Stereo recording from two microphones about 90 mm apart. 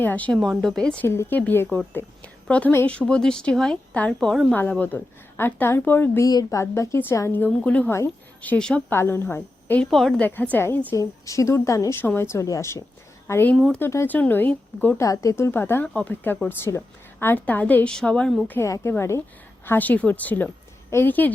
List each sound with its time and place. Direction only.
0.0 s a woman's voice: 15° left (ahead or behind)
0.6 s a woman's voice: 5° left (ahead or behind)
1.0 s speech: 30° left (ahead or behind)
1.4 s a woman's voice: 15° left (ahead or behind)
6.1 s a woman's voice: 40° left (ahead or behind); by 8.8 s 10° left (ahead or behind)
8.9 s speech: 25° left (ahead or behind)
9.8 s a woman's voice: 5° left (ahead or behind)
10.2 s speech: 20° left (ahead or behind)
10.9 s a woman's voice: 35° left (ahead or behind)
11.9 s speech: 25° left (ahead or behind)
15.0 s a woman's voice: 40° left (ahead or behind); by 18.3 s 10° left (ahead or behind)
18.6 s a woman's voice: 30° left (ahead or behind)